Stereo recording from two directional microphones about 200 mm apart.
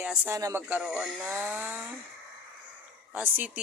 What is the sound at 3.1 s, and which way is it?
Speech, 10° right (ahead or behind).